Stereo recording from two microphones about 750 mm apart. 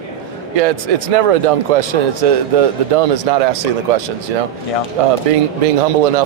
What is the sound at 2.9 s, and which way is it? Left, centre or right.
Speech, right.